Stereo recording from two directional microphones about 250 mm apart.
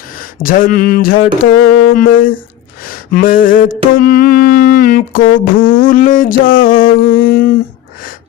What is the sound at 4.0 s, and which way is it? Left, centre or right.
Mantra, left.